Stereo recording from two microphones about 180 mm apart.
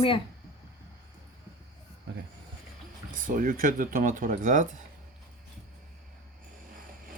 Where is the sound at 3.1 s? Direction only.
50° right (ahead or behind).